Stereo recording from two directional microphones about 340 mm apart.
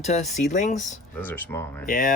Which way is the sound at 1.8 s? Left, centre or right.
Left.